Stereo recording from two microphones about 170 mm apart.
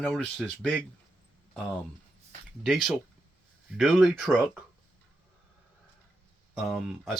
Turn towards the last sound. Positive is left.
turn(degrees=0)  # may be behind; listen again after turning